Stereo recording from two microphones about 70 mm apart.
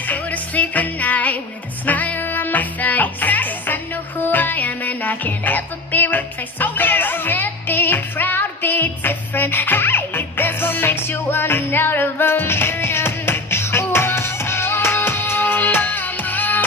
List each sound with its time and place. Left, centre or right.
0.1 s music: left